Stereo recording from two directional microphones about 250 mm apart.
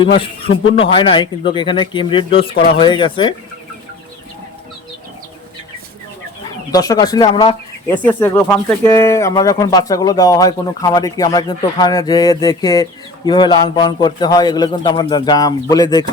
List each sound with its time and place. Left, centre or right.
0.5 s a man's voice: left
6.7 s speech: centre